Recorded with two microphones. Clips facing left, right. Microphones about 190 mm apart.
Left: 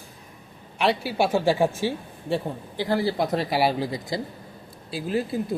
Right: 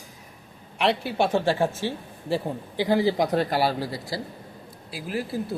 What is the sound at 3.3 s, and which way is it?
A woman's voice, 10° left (ahead or behind).